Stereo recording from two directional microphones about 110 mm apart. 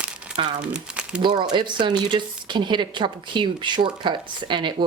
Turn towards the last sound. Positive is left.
turn(degrees=-45)  # may be behind; listen again after turning